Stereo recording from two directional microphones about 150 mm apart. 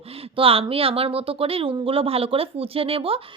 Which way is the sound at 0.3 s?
40° right (ahead or behind).